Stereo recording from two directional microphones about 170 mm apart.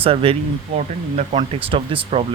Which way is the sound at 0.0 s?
35° right (ahead or behind).